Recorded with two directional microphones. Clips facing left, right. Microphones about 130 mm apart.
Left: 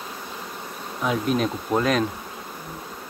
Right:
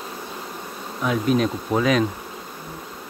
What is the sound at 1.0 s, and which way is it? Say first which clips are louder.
Bee: right 2 dB; centre (ahead or behind).